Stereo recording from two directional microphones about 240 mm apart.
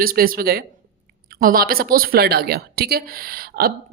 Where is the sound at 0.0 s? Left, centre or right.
Right.